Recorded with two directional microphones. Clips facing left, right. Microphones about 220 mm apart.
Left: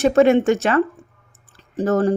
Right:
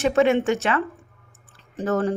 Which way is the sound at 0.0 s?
40° left (ahead or behind).